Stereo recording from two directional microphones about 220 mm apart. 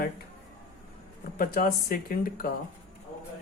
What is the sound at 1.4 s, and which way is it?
Speech, 40° left (ahead or behind).